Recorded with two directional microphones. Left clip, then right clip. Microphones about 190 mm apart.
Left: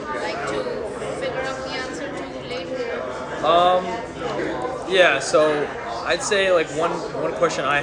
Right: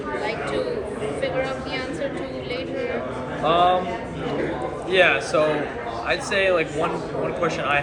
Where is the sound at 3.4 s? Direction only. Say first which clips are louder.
Left 2 dB; 45° left (ahead or behind).